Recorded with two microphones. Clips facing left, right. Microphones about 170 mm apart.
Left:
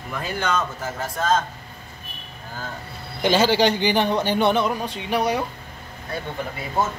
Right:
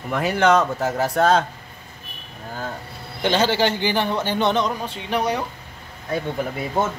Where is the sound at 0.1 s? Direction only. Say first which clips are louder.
Right 8 dB; 75° right (ahead or behind).